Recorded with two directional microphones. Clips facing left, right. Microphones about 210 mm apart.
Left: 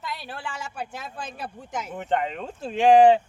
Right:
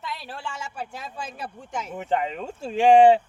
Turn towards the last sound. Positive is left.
turn(degrees=-5)  # may be behind; listen again after turning